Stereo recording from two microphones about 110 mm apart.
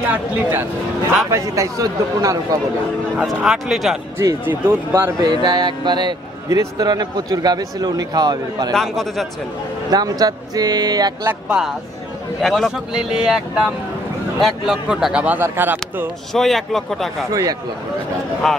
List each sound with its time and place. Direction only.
0.1 s speech: 15° right (ahead or behind)
1.3 s speech: 30° right (ahead or behind)
3.2 s a man's voice: 5° right (ahead or behind)
4.2 s speech: 25° right (ahead or behind)
5.2 s speech: 40° right (ahead or behind)
8.7 s a man's voice: 5° left (ahead or behind)
9.8 s speech: 35° right (ahead or behind)
11.2 s speech: 10° right (ahead or behind)
12.4 s a man's voice: centre (ahead or behind)
14.4 s speech: 5° right (ahead or behind)
16.3 s a man's voice: centre (ahead or behind)
17.3 s speech: 30° right (ahead or behind)
18.4 s a man's voice: centre (ahead or behind)